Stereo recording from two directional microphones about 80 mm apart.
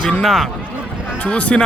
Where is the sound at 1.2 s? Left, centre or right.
Centre.